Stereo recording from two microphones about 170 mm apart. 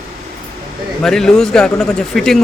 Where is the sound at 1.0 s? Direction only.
5° left (ahead or behind).